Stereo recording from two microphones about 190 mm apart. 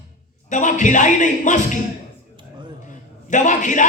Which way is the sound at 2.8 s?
40° left (ahead or behind).